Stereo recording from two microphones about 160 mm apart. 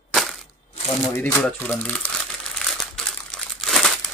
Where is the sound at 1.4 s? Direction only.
10° left (ahead or behind).